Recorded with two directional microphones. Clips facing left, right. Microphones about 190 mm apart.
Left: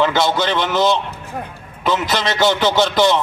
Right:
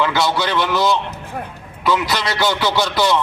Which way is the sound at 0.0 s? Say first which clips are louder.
Left 2 dB; 20° left (ahead or behind).